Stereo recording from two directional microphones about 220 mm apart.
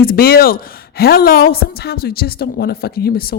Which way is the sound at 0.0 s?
45° left (ahead or behind).